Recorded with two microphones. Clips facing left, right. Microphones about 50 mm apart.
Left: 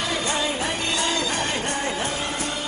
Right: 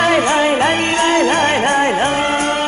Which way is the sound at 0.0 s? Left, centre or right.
Right.